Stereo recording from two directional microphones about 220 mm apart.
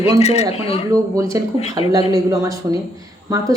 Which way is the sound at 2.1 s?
15° right (ahead or behind).